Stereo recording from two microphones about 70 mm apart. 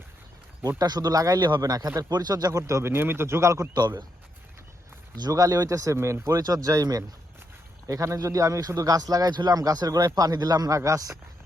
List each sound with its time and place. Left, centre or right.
0.8 s speech: right
2.5 s speech: right
2.9 s speech: right
3.8 s a man's voice: right
5.2 s speech: right
6.4 s a man's voice: right
7.9 s a man's voice: right
10.2 s a man's voice: right
10.8 s speech: right